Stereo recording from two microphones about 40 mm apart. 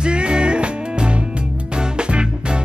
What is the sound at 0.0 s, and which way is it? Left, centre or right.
Music, right.